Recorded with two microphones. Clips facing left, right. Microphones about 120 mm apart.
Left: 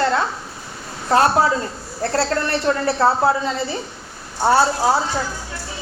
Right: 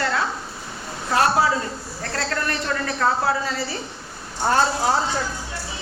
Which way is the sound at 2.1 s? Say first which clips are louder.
Left 5 dB; 30° left (ahead or behind).